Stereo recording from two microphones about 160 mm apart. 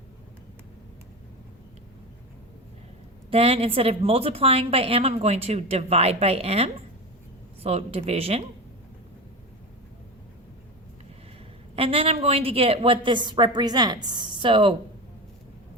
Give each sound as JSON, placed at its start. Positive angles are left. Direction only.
{"t": 3.2, "sound": "a woman's voice", "side_deg": -35}
{"t": 11.8, "sound": "a woman's voice", "side_deg": -35}